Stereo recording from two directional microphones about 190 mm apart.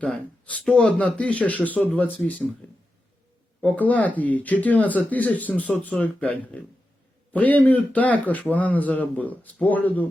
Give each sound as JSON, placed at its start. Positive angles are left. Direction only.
{"t": 0.0, "sound": "a man's voice", "side_deg": 5}
{"t": 3.6, "sound": "a man's voice", "side_deg": 10}